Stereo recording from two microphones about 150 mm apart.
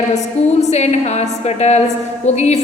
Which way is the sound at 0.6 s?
45° left (ahead or behind).